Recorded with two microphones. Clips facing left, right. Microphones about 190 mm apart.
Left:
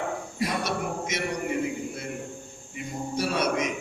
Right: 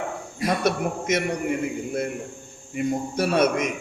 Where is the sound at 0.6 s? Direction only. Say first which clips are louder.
Right 5 dB; 55° right (ahead or behind).